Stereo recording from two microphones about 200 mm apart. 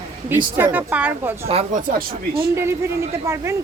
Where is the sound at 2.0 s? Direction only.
45° right (ahead or behind).